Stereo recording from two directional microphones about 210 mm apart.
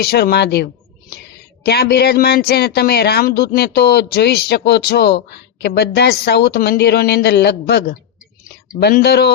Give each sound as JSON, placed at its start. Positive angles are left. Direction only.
{"t": 0.0, "sound": "speech", "side_deg": 50}